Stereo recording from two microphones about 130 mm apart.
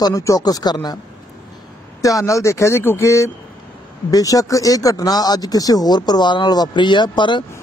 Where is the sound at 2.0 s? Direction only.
25° left (ahead or behind).